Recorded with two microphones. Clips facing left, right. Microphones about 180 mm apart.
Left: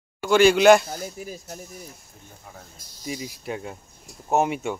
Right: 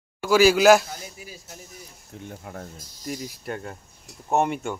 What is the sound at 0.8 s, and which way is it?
Speech, 45° left (ahead or behind).